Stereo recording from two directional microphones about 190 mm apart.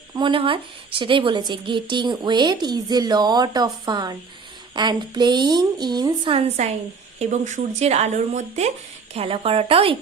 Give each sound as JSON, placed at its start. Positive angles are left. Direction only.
{"t": 0.1, "sound": "a woman's voice", "side_deg": -25}
{"t": 7.2, "sound": "a woman's voice", "side_deg": -40}